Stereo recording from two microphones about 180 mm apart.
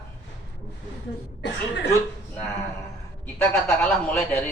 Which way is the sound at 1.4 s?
70° left (ahead or behind).